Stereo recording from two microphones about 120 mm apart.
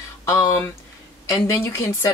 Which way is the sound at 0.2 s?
30° left (ahead or behind).